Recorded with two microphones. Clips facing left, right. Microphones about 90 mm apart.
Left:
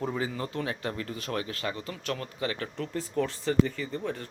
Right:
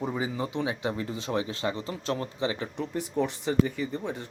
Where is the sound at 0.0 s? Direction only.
15° right (ahead or behind).